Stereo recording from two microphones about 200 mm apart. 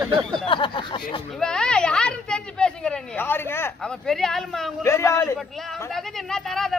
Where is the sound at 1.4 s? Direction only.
5° left (ahead or behind).